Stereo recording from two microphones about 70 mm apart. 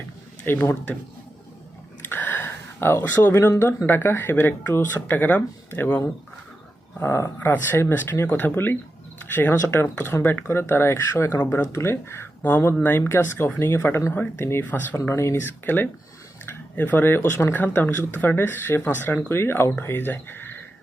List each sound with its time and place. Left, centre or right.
0.4 s speech: left
2.0 s a sound: left
3.8 s speech: left
7.0 s speech: left
7.3 s speech: left
14.6 s speech: left
14.9 s speech: left